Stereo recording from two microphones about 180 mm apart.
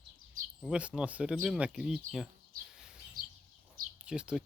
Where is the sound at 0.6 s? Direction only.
5° right (ahead or behind).